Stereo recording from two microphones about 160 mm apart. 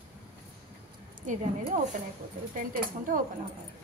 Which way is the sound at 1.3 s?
55° right (ahead or behind).